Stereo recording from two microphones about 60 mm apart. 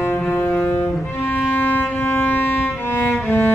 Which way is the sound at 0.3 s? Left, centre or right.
Left.